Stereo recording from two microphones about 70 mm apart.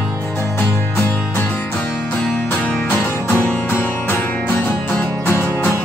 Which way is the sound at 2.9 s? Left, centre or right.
Left.